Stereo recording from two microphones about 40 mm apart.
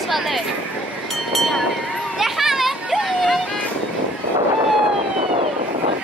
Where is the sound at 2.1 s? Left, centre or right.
Centre.